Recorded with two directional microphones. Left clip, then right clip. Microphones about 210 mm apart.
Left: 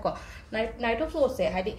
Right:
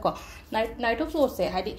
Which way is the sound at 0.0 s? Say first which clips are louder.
Right 3 dB; 30° right (ahead or behind).